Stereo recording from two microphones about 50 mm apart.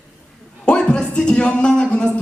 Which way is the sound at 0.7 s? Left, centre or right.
Centre.